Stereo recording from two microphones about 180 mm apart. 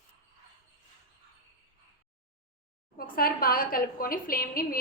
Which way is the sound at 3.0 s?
55° left (ahead or behind).